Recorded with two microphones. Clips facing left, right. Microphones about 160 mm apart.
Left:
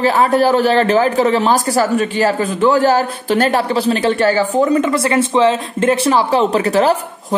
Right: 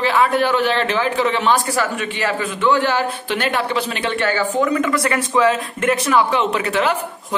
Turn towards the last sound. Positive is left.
turn(degrees=35)  # may be behind; listen again after turning